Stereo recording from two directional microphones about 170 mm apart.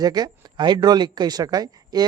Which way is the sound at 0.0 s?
25° right (ahead or behind).